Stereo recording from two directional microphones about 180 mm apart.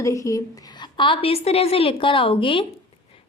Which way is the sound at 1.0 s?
30° left (ahead or behind).